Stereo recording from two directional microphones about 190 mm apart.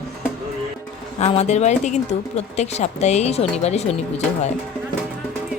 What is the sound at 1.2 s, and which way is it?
Speech, 35° left (ahead or behind).